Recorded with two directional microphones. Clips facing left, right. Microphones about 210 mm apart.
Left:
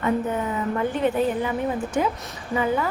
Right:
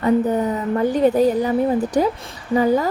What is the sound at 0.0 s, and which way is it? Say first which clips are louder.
A woman's voice: right 6 dB; 35° right (ahead or behind).